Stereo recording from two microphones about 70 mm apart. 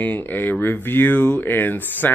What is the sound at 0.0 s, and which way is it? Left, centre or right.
Speech, left.